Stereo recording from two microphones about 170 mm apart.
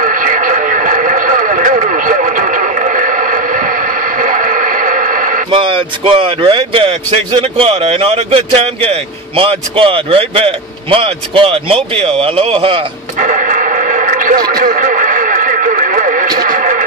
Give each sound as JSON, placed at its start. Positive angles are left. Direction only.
{"t": 0.0, "sound": "radio", "side_deg": -50}
{"t": 5.5, "sound": "speech", "side_deg": -30}
{"t": 13.2, "sound": "radio", "side_deg": -50}
{"t": 16.3, "sound": "a sound", "side_deg": -50}